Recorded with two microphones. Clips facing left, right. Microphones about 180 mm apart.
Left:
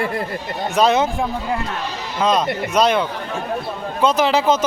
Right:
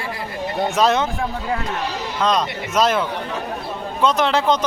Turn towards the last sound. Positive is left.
turn(degrees=0)  # may be behind; listen again after turning